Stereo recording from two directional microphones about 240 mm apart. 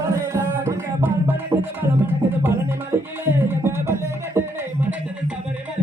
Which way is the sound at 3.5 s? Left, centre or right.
Centre.